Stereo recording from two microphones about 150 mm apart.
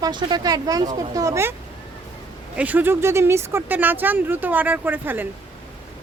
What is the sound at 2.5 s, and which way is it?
Speech, 10° right (ahead or behind).